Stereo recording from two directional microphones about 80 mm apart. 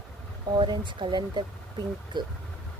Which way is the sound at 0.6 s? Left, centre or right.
Right.